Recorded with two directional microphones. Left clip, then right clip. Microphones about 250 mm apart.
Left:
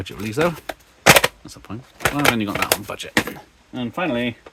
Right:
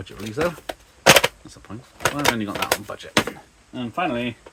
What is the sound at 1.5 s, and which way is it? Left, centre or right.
Speech, left.